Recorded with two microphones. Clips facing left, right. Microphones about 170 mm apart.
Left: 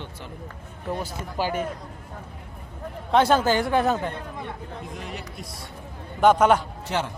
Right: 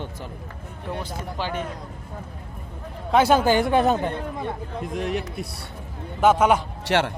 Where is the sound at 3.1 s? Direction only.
10° right (ahead or behind).